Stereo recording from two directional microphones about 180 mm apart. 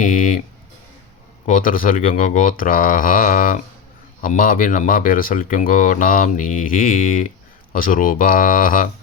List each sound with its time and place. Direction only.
0.0 s speech: 50° left (ahead or behind)
1.5 s speech: 50° left (ahead or behind)